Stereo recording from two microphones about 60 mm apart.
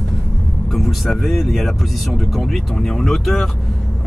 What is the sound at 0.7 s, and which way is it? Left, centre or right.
Speech, centre.